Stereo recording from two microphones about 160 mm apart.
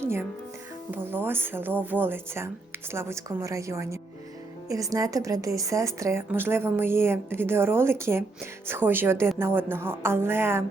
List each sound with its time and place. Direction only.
0.0 s music: 15° right (ahead or behind)
0.9 s a woman's voice: 15° right (ahead or behind)